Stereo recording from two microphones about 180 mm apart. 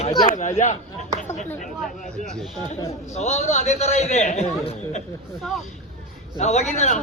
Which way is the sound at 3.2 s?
40° left (ahead or behind).